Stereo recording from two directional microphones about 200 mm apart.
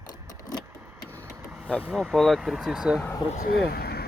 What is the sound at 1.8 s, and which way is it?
Speech, centre (ahead or behind).